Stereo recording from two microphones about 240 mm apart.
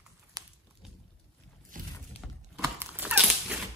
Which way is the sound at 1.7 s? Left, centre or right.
Right.